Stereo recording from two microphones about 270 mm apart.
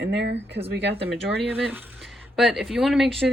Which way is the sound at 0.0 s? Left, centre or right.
Right.